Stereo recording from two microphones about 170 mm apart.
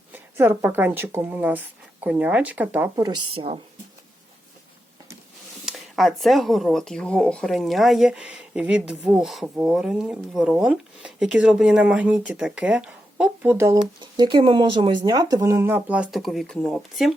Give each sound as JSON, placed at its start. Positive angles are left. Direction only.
{"t": 0.1, "sound": "speech", "side_deg": -10}
{"t": 2.9, "sound": "speech", "side_deg": -25}
{"t": 5.6, "sound": "speech", "side_deg": 0}